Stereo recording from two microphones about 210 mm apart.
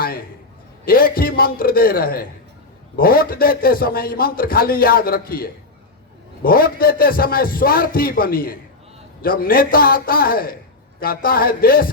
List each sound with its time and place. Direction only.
0.9 s a man's voice: 45° left (ahead or behind)